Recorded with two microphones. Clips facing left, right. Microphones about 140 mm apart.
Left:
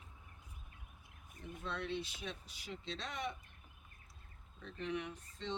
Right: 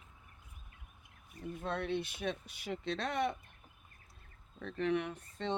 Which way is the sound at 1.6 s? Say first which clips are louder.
Right 5 dB; 55° right (ahead or behind).